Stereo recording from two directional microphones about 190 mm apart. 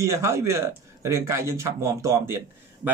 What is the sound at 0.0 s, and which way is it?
Speech, 15° right (ahead or behind).